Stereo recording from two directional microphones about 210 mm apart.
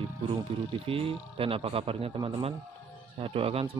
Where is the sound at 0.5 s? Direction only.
25° right (ahead or behind).